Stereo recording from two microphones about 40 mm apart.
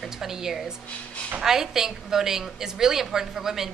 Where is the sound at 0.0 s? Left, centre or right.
Centre.